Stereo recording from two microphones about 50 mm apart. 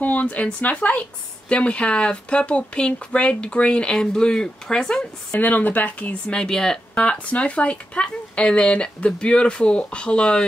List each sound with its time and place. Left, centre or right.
0.0 s speech: left; by 5.4 s centre
5.4 s speech: left
6.3 s speech: centre
7.0 s speech: left